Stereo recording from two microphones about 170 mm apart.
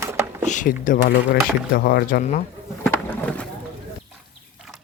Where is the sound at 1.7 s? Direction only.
65° left (ahead or behind).